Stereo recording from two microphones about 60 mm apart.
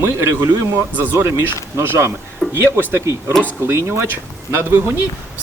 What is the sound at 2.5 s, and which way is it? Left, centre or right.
Speech, right.